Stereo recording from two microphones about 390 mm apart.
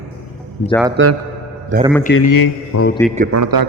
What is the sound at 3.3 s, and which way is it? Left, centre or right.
Speech, right.